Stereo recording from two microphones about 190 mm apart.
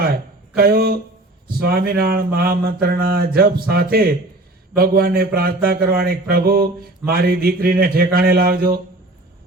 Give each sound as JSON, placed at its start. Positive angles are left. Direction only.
{"t": 0.5, "sound": "a man's voice", "side_deg": -55}